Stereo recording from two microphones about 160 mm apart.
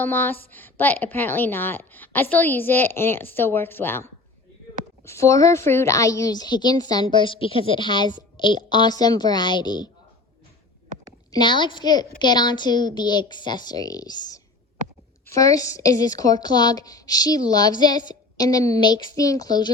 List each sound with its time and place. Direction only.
0.0 s a woman's voice: 10° left (ahead or behind)
11.3 s a woman's voice: 30° left (ahead or behind)